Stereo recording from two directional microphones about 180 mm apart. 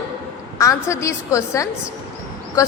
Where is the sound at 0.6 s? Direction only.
15° left (ahead or behind).